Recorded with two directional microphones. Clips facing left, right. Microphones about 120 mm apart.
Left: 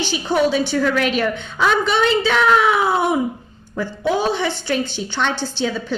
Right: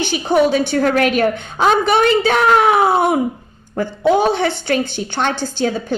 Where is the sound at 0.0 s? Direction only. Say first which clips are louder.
Right 3 dB; 55° right (ahead or behind).